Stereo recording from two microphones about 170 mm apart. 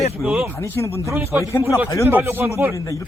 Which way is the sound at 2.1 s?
10° right (ahead or behind).